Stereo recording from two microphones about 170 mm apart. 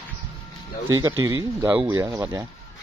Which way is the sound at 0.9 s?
20° right (ahead or behind).